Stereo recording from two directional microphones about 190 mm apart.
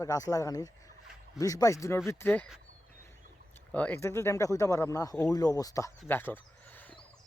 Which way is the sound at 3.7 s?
10° left (ahead or behind).